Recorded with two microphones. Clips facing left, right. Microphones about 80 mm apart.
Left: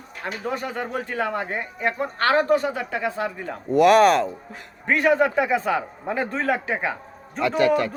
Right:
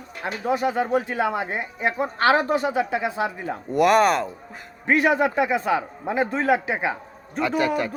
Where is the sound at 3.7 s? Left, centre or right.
Centre.